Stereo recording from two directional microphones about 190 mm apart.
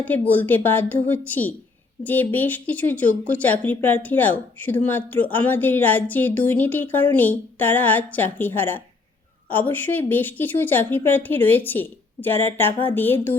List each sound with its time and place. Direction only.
0.0 s speech: 10° left (ahead or behind)